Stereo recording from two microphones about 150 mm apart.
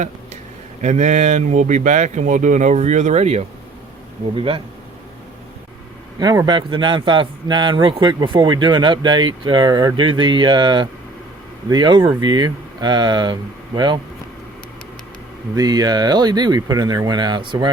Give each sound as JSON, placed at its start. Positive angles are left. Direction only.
{"t": 0.8, "sound": "speech", "side_deg": -50}
{"t": 4.4, "sound": "speech", "side_deg": -35}
{"t": 6.1, "sound": "speech", "side_deg": -25}
{"t": 15.5, "sound": "speech", "side_deg": -25}